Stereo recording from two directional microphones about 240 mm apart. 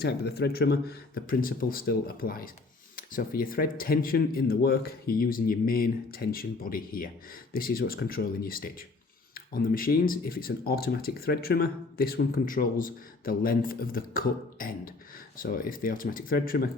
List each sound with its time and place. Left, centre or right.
0.0 s speech: left